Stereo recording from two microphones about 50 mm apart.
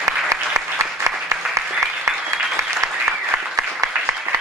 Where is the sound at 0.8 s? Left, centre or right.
Right.